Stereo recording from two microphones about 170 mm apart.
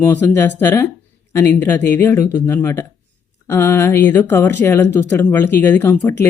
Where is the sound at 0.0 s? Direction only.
10° left (ahead or behind).